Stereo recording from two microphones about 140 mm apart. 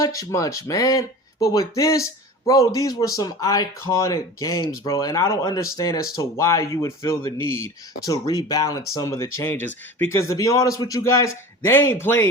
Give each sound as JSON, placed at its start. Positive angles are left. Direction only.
{"t": 0.0, "sound": "speech", "side_deg": 25}